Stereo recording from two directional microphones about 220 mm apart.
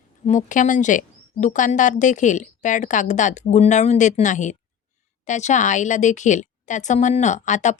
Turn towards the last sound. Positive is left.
turn(degrees=35)  # may be behind; listen again after turning